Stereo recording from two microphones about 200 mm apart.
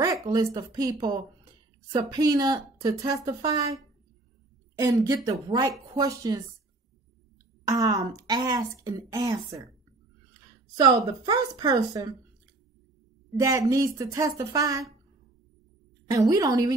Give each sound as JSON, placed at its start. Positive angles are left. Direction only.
{"t": 0.0, "sound": "a woman's voice", "side_deg": -15}
{"t": 4.7, "sound": "a woman's voice", "side_deg": -15}
{"t": 7.6, "sound": "a woman's voice", "side_deg": -15}
{"t": 10.8, "sound": "a woman's voice", "side_deg": -20}
{"t": 13.4, "sound": "a woman's voice", "side_deg": -15}
{"t": 16.1, "sound": "a woman's voice", "side_deg": -15}